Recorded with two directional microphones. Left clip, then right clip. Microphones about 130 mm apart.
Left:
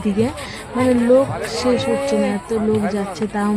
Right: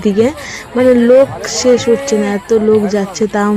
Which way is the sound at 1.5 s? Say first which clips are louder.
Right 8 dB; 20° right (ahead or behind).